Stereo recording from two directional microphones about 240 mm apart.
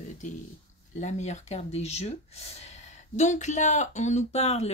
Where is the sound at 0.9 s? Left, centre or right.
Left.